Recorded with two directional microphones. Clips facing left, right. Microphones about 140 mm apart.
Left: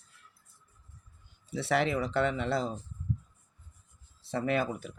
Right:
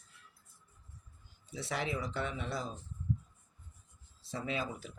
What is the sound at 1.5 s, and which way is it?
Speech, 70° left (ahead or behind).